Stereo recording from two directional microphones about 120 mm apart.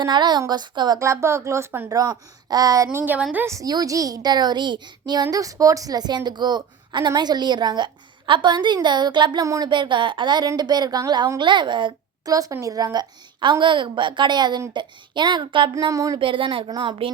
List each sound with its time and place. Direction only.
0.0 s a child's voice: 35° right (ahead or behind)
0.9 s a woman's voice: 25° right (ahead or behind)
1.9 s a woman's voice: 30° right (ahead or behind)
3.0 s a woman's voice: 15° right (ahead or behind)
3.3 s a child's voice: 25° right (ahead or behind); by 15.7 s 40° right (ahead or behind)
15.8 s a woman's voice: 30° right (ahead or behind)
16.1 s speech: 45° right (ahead or behind)